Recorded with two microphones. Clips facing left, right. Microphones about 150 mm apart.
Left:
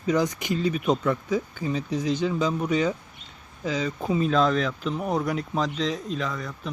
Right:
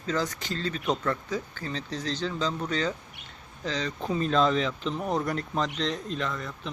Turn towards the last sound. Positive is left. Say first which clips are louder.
# left 2 dB
turn(degrees=0)  # may be behind; listen again after turning